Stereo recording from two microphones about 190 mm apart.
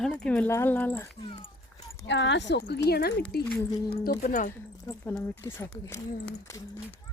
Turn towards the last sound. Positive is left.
turn(degrees=15)  # may be behind; listen again after turning